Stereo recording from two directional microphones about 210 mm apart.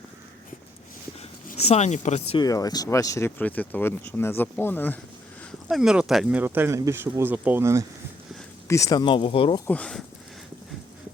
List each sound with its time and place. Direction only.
1.5 s speech: 30° left (ahead or behind); by 4.9 s 10° left (ahead or behind)
5.6 s speech: centre (ahead or behind)
8.6 s speech: 15° left (ahead or behind)
9.6 s speech: 5° left (ahead or behind)